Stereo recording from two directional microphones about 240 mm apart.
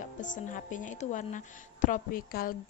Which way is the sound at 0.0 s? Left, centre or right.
Left.